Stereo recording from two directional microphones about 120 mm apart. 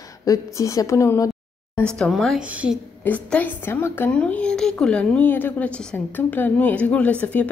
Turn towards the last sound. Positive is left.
turn(degrees=15)  # may be behind; listen again after turning